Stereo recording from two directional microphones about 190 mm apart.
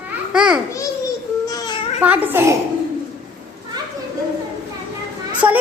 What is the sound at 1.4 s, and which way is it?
Baby cry, 20° left (ahead or behind).